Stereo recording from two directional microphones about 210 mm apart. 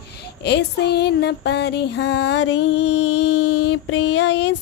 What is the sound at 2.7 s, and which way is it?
Music, 30° left (ahead or behind).